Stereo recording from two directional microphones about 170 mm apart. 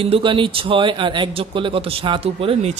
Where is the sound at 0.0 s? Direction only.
30° right (ahead or behind).